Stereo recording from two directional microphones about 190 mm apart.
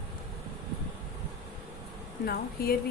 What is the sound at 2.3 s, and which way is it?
Speech, 55° left (ahead or behind).